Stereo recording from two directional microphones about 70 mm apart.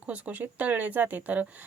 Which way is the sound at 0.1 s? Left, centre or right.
Right.